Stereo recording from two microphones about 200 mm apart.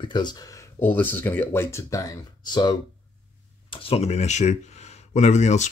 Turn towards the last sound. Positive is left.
turn(degrees=35)  # may be behind; listen again after turning